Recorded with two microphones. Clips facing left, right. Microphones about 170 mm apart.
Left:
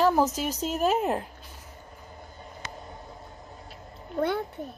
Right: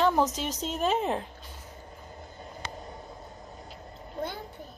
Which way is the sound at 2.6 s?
30° right (ahead or behind).